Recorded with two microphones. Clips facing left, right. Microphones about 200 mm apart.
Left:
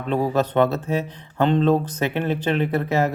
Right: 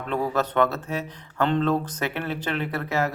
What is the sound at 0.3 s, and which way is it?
Speech, 25° left (ahead or behind).